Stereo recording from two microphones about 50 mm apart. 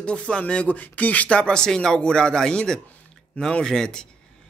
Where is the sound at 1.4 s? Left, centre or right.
Centre.